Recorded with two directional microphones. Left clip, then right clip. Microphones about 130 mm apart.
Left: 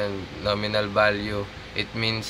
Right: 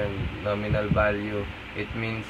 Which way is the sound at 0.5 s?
40° left (ahead or behind).